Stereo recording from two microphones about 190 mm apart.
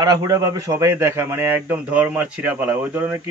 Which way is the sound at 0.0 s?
20° right (ahead or behind).